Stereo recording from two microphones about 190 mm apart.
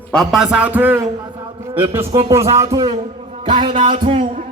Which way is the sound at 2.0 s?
25° right (ahead or behind).